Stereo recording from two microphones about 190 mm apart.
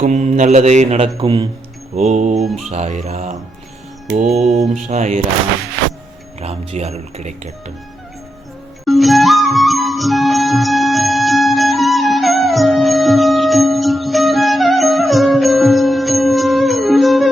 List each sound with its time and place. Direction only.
0.0 s mantra: 40° right (ahead or behind)
4.0 s mantra: 50° right (ahead or behind)
4.3 s mantra: centre (ahead or behind)
4.7 s mantra: 35° right (ahead or behind)
6.4 s mantra: 35° right (ahead or behind)
8.8 s music: centre (ahead or behind)